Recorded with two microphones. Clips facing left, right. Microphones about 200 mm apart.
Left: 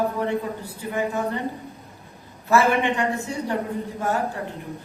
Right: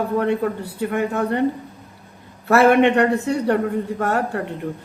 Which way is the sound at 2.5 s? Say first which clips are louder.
Right 6 dB; 65° right (ahead or behind).